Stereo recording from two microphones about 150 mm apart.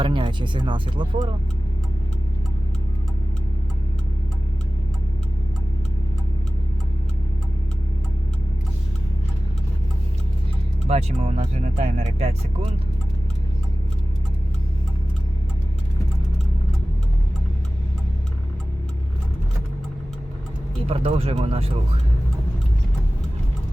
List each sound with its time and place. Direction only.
0.0 s speech: 35° right (ahead or behind)
10.8 s speech: 45° right (ahead or behind)
20.8 s speech: 40° right (ahead or behind)